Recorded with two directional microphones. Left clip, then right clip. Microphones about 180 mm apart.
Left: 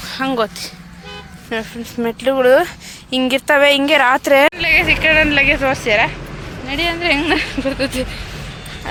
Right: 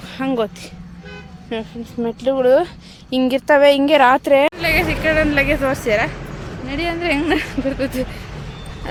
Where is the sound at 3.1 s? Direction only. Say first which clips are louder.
Even; 20° right (ahead or behind).